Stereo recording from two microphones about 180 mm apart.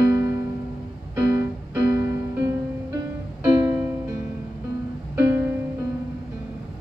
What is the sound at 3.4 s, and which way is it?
Music, 10° right (ahead or behind).